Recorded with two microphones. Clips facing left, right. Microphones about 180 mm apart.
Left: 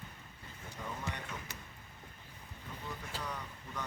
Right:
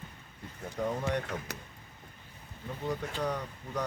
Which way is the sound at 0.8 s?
65° right (ahead or behind).